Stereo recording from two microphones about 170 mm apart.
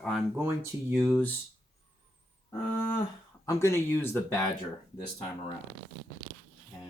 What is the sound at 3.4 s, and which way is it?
Speech, 15° left (ahead or behind).